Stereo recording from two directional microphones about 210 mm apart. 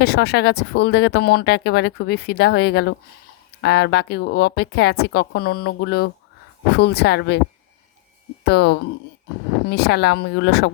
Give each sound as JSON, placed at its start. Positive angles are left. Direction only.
{"t": 0.0, "sound": "speech", "side_deg": 50}
{"t": 8.4, "sound": "speech", "side_deg": 55}